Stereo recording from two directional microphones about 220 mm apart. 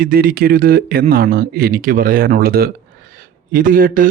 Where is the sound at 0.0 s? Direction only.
40° right (ahead or behind).